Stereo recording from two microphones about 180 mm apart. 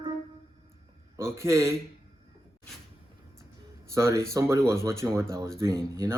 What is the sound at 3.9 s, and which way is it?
Speech, 15° right (ahead or behind).